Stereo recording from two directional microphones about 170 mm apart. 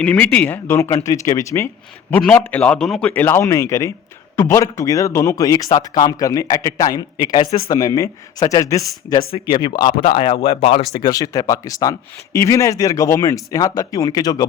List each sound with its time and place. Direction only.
0.0 s a man's voice: 10° left (ahead or behind); by 9.9 s 25° left (ahead or behind)
9.9 s speech: 55° left (ahead or behind)
10.2 s speech: 30° left (ahead or behind)
10.9 s speech: 25° left (ahead or behind)